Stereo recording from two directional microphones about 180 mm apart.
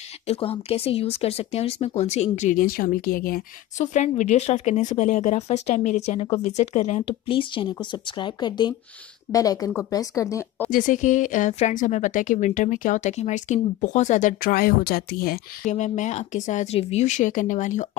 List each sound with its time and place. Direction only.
0.3 s speech: 35° left (ahead or behind); by 10.7 s 15° left (ahead or behind)
10.7 s speech: 45° left (ahead or behind)